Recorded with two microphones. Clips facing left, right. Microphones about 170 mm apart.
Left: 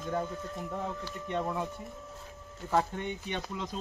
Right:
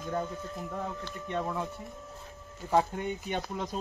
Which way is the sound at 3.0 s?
45° right (ahead or behind).